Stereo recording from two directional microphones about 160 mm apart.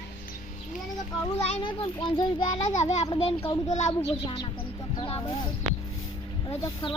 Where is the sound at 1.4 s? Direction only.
35° left (ahead or behind).